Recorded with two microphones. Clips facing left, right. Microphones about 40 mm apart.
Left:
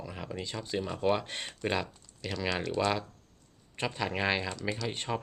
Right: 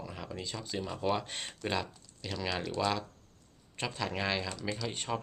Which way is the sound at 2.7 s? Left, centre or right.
Centre.